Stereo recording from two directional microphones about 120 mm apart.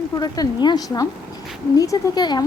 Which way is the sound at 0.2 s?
35° left (ahead or behind).